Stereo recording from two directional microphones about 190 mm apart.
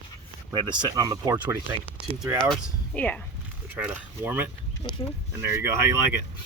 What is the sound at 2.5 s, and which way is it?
Speech, 10° left (ahead or behind).